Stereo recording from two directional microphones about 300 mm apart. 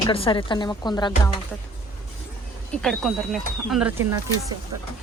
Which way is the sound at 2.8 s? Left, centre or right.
Centre.